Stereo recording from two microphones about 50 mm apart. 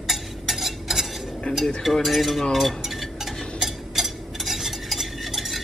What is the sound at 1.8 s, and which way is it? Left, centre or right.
Cutlery, centre.